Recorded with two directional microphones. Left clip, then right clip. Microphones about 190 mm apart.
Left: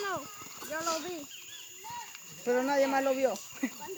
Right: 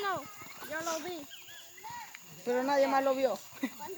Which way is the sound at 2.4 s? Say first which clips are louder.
Left 1 dB; 50° left (ahead or behind).